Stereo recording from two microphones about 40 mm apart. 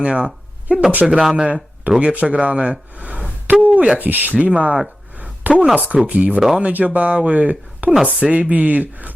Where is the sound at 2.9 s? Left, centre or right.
Right.